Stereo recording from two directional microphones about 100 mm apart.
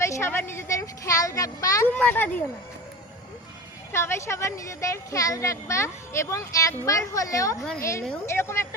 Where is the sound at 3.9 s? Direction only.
25° left (ahead or behind).